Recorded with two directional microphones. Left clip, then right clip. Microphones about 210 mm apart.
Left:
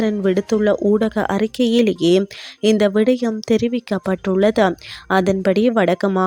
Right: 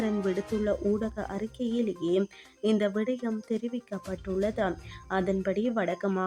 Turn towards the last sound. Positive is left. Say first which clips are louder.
# left 13 dB
turn(degrees=40)  # may be behind; listen again after turning